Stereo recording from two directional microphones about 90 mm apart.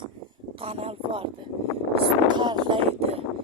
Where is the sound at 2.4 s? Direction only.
60° right (ahead or behind); by 3.2 s 90° right.